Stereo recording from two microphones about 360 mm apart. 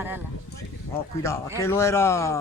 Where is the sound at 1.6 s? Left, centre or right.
Centre.